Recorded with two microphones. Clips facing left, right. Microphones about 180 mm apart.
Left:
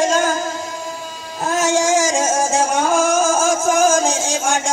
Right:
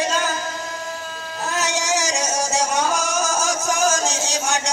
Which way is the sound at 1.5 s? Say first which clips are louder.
Left 7 dB; 50° left (ahead or behind).